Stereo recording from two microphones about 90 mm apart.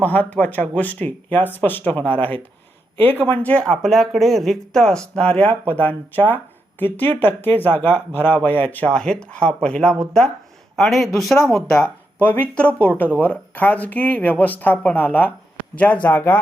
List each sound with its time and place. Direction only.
0.0 s speech: 20° left (ahead or behind)
12.2 s speech: 15° left (ahead or behind)